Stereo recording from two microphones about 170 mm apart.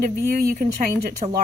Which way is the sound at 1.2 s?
40° right (ahead or behind).